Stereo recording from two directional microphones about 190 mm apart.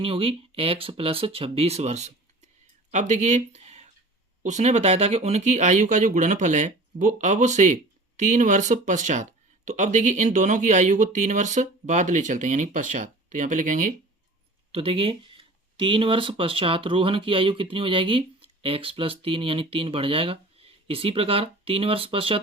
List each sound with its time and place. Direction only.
0.0 s speech: 30° right (ahead or behind); by 13.9 s 45° right (ahead or behind)
14.7 s speech: 30° right (ahead or behind)